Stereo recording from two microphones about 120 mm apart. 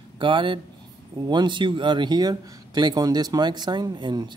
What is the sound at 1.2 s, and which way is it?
Speech, 40° right (ahead or behind).